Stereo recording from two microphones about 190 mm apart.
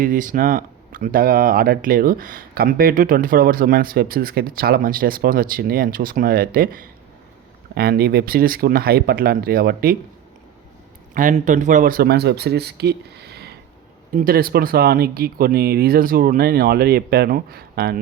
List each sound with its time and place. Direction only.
0.0 s speech: 45° right (ahead or behind)
11.1 s speech: 45° right (ahead or behind)